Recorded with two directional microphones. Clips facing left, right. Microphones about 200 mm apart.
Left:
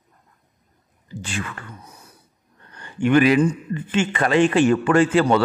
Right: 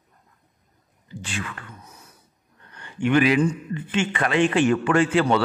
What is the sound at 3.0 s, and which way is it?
A man's voice, 45° left (ahead or behind).